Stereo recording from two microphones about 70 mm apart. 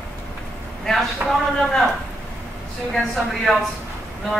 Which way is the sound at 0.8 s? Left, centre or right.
Centre.